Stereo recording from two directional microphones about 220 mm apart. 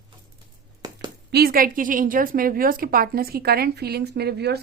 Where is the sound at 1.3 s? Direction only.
45° right (ahead or behind).